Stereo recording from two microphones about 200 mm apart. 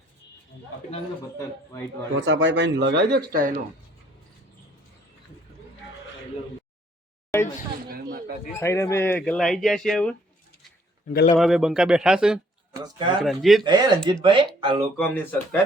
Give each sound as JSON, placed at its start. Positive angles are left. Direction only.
{"t": 1.4, "sound": "speech", "side_deg": 15}
{"t": 2.1, "sound": "speech", "side_deg": -65}
{"t": 7.3, "sound": "speech", "side_deg": 15}
{"t": 8.5, "sound": "speech", "side_deg": 15}
{"t": 11.3, "sound": "speech", "side_deg": 0}
{"t": 12.8, "sound": "speech", "side_deg": -25}
{"t": 13.2, "sound": "speech", "side_deg": 0}
{"t": 13.7, "sound": "speech", "side_deg": -20}
{"t": 14.9, "sound": "speech", "side_deg": 5}